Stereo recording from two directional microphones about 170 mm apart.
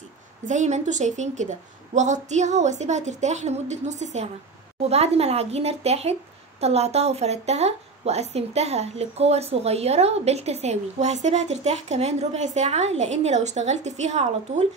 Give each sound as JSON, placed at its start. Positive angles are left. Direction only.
{"t": 0.5, "sound": "a woman's voice", "side_deg": -45}